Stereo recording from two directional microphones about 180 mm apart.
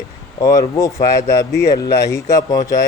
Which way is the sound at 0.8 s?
20° left (ahead or behind).